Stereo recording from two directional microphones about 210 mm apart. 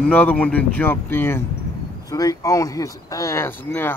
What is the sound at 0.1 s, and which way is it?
Speech, 10° left (ahead or behind).